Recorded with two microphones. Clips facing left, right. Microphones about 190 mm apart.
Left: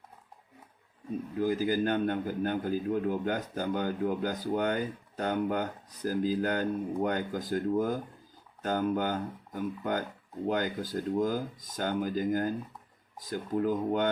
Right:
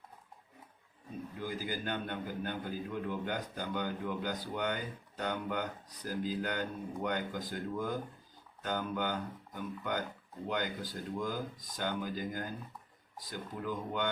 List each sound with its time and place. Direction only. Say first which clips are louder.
1.4 s a man's voice: left 12 dB; 45° left (ahead or behind)